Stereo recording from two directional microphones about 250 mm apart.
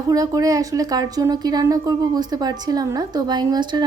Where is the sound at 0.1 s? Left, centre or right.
Centre.